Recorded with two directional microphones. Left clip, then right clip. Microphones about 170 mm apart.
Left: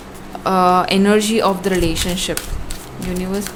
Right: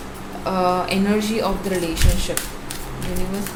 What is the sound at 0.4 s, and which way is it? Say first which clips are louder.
Speech: left 6 dB; 55° left (ahead or behind).